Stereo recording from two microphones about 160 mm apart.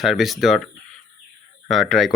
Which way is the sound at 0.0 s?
Centre (ahead or behind).